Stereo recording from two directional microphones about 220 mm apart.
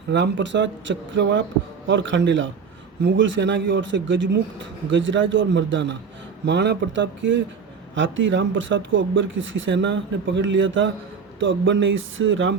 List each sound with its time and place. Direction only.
0.1 s a man's voice: 55° right (ahead or behind)